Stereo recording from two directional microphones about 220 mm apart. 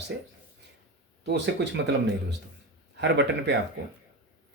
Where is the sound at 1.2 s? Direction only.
50° right (ahead or behind).